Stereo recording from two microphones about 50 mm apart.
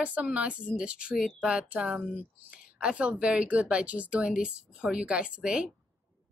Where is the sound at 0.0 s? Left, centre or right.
Right.